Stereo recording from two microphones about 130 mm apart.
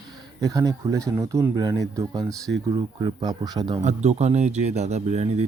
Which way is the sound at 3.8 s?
60° right (ahead or behind).